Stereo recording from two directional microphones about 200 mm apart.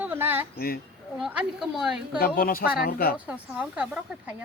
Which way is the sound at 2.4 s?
45° left (ahead or behind).